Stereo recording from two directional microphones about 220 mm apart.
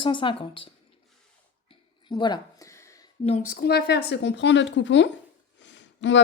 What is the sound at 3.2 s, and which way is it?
Speech, 30° left (ahead or behind).